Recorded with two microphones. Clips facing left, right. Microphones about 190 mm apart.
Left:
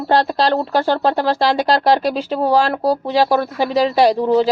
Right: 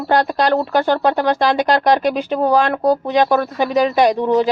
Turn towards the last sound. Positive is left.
turn(degrees=30)  # may be behind; listen again after turning